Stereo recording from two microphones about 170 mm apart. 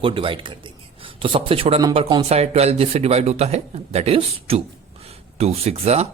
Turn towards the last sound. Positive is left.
turn(degrees=-40)  # may be behind; listen again after turning